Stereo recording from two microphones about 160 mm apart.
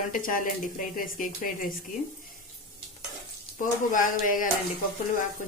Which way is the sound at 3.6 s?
55° left (ahead or behind).